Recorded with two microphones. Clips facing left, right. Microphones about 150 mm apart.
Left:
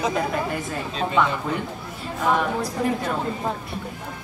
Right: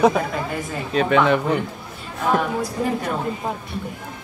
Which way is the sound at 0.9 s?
75° right (ahead or behind).